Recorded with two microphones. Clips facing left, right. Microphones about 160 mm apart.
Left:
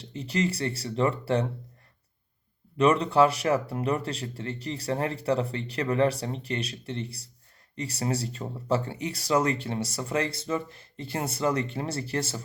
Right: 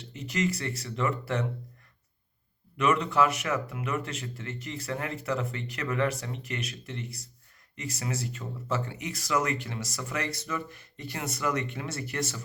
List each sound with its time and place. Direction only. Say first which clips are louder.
0.0 s speech: left 2 dB; 30° left (ahead or behind)
2.7 s speech: left 4 dB; 30° left (ahead or behind)